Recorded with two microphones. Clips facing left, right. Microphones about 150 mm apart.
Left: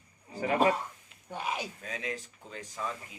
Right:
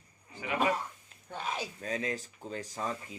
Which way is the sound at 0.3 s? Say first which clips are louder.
Left 5 dB; 40° left (ahead or behind).